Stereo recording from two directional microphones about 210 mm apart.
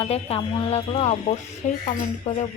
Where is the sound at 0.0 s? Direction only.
30° left (ahead or behind).